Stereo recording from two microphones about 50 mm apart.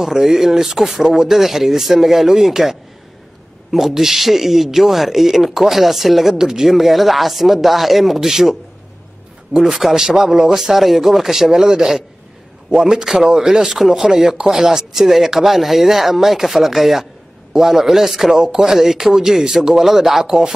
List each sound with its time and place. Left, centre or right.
0.0 s speech: centre
9.6 s speech: centre
18.3 s speech: centre